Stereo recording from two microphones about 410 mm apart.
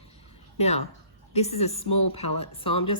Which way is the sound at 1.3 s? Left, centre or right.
Centre.